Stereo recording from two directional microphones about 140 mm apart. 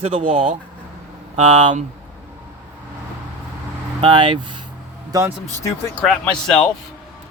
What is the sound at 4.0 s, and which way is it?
Speech, 35° right (ahead or behind).